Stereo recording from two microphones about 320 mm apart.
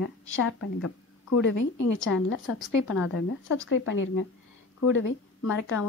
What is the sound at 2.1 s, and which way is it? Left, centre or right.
Speech, left.